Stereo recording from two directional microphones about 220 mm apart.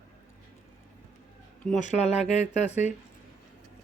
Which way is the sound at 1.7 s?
35° left (ahead or behind).